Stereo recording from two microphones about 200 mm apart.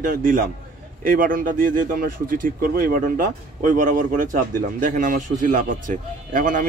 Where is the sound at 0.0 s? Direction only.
45° right (ahead or behind).